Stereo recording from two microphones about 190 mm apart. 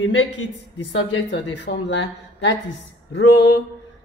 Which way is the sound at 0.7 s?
75° left (ahead or behind).